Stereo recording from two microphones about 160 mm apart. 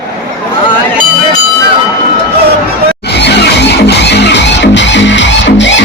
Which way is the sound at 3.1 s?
90° left.